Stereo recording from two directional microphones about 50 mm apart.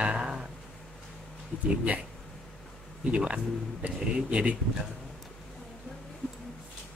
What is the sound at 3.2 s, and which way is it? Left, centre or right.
Speech, right.